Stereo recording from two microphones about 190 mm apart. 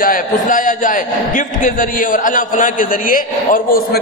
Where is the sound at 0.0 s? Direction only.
45° left (ahead or behind).